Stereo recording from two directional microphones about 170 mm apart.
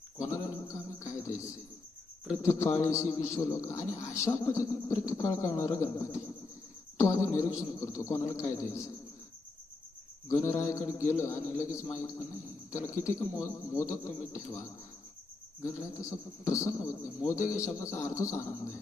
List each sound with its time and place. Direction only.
0.2 s a sound: 20° left (ahead or behind)
2.4 s a man's voice: 15° left (ahead or behind)
10.2 s a man's voice: 15° left (ahead or behind)
12.7 s a man's voice: 20° left (ahead or behind)
15.8 s a man's voice: 20° left (ahead or behind)